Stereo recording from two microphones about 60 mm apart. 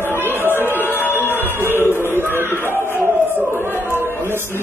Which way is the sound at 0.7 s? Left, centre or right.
Left.